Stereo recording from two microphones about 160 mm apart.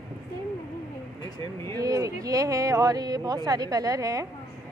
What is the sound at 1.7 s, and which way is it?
Speech, 20° right (ahead or behind).